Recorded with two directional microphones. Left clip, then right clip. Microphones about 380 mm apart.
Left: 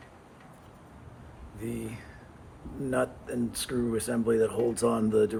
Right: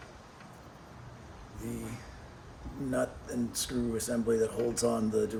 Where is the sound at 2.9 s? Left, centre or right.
Centre.